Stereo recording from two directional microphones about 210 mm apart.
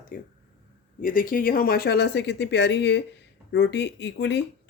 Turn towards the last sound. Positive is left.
turn(degrees=55)  # may be behind; listen again after turning